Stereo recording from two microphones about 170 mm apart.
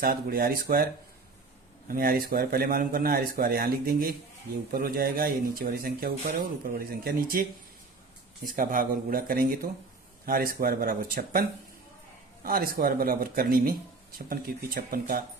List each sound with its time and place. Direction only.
0.0 s speech: 60° right (ahead or behind)
1.9 s speech: 60° right (ahead or behind)
8.4 s speech: 55° right (ahead or behind)